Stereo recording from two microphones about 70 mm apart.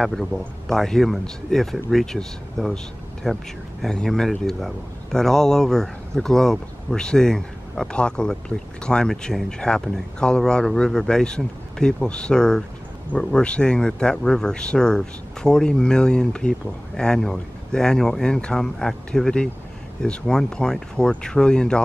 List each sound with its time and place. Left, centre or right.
0.0 s speech: centre